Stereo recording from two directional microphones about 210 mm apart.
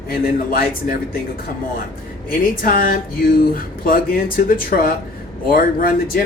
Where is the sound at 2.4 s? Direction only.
45° left (ahead or behind).